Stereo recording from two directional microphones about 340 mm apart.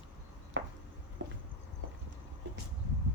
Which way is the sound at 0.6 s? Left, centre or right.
Right.